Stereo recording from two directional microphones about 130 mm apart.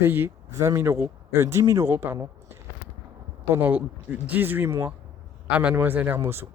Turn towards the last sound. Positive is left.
turn(degrees=-20)  # may be behind; listen again after turning